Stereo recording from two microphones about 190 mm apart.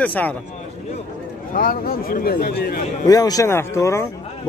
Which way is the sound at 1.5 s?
50° left (ahead or behind).